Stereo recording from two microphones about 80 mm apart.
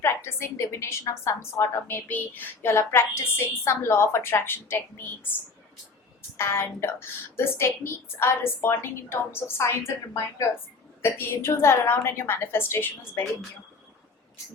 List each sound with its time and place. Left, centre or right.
0.0 s a woman's voice: left
6.3 s a woman's voice: left
11.0 s a woman's voice: left